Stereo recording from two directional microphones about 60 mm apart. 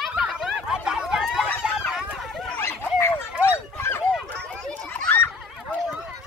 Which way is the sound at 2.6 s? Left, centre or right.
Left.